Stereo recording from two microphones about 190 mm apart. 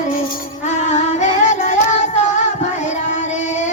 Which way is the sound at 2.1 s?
40° left (ahead or behind).